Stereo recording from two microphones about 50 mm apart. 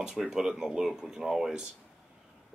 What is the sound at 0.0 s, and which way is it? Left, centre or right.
Speech, centre.